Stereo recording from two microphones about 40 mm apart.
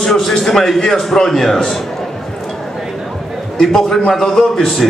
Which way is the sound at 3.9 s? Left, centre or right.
Centre.